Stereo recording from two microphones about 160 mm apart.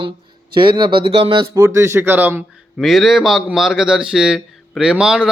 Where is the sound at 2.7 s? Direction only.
Centre (ahead or behind).